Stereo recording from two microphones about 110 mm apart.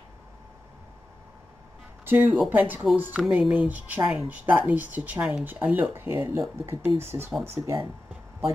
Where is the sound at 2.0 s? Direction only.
15° right (ahead or behind).